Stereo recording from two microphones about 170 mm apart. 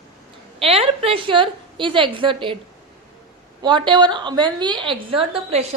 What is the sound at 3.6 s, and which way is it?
A woman's voice, 25° right (ahead or behind).